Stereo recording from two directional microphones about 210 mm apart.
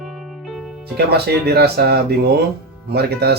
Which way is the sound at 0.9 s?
50° right (ahead or behind).